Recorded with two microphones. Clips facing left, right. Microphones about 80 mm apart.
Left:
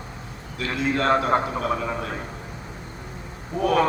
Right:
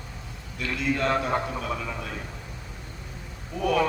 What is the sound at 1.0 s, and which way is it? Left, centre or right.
A man's voice, left.